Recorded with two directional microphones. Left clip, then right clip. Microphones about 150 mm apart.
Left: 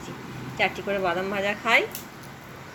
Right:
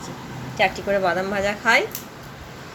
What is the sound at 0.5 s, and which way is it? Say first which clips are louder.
A woman's voice: right 5 dB; 15° right (ahead or behind).